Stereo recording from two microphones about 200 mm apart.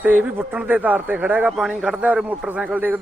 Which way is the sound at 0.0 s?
10° right (ahead or behind).